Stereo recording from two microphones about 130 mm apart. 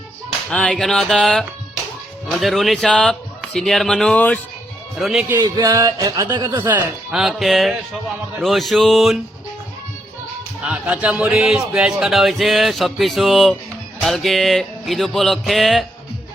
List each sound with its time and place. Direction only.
0.5 s speech: 5° left (ahead or behind)
4.9 s speech: centre (ahead or behind)
5.4 s speech: 30° right (ahead or behind)
7.1 s speech: 5° right (ahead or behind)
10.6 s speech: 10° right (ahead or behind)